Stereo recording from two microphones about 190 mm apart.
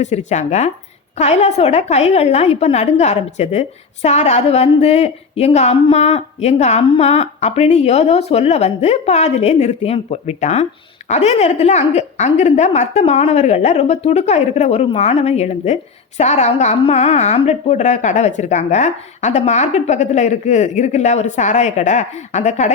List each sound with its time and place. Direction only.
0.0 s a woman's voice: 35° left (ahead or behind)